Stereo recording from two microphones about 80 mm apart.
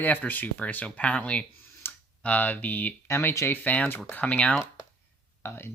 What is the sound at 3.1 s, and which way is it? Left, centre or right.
Speech, left.